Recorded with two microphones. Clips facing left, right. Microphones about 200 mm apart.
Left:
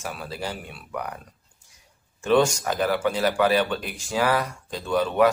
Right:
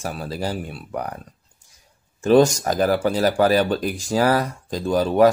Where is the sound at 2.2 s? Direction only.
40° right (ahead or behind).